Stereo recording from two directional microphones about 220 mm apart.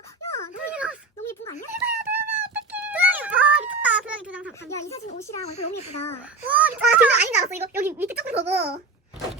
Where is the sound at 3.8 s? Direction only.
5° right (ahead or behind).